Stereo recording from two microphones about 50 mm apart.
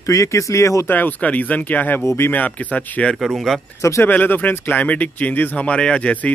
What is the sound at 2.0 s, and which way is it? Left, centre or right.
Speech, left.